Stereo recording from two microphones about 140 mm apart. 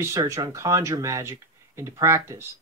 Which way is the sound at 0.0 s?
20° right (ahead or behind).